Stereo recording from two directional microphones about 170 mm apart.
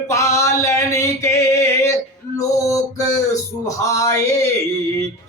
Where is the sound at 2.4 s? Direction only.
20° left (ahead or behind).